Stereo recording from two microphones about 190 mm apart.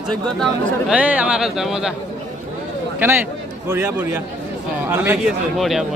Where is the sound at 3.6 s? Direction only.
10° right (ahead or behind).